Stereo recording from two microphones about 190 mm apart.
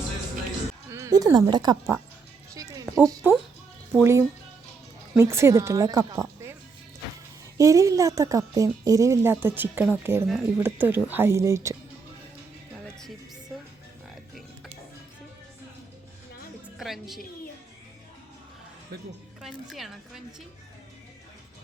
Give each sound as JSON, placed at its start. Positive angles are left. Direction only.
{"t": 0.9, "sound": "music", "side_deg": -15}
{"t": 1.5, "sound": "speech", "side_deg": -20}
{"t": 2.6, "sound": "music", "side_deg": -20}
{"t": 3.9, "sound": "speech", "side_deg": -15}
{"t": 7.6, "sound": "speech", "side_deg": -15}
{"t": 16.7, "sound": "music", "side_deg": 0}
{"t": 19.4, "sound": "a woman's voice", "side_deg": 0}